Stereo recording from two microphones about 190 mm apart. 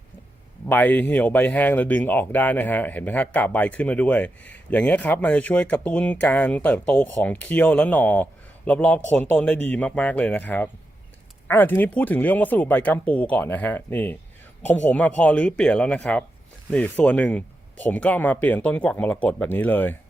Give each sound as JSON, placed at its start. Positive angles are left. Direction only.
{"t": 0.7, "sound": "speech", "side_deg": 10}
{"t": 14.6, "sound": "speech", "side_deg": 35}
{"t": 14.8, "sound": "speech", "side_deg": 5}